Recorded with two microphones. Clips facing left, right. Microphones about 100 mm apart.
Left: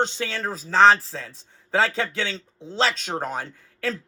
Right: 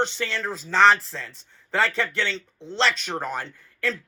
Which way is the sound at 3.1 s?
10° left (ahead or behind).